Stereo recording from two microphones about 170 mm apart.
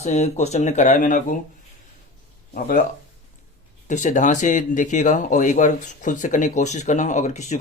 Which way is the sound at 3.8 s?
45° left (ahead or behind).